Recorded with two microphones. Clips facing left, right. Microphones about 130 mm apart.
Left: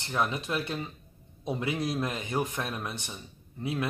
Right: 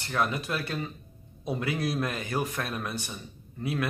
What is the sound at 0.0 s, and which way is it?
Speech, 20° left (ahead or behind).